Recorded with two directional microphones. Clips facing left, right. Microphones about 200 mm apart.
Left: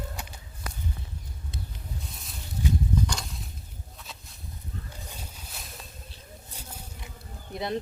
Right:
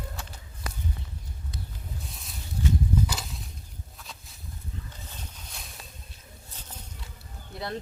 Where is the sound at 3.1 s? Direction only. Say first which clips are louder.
Even; centre (ahead or behind).